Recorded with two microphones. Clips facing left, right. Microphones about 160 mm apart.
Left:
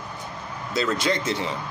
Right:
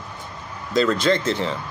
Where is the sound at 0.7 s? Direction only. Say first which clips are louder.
Right 5 dB; 5° left (ahead or behind).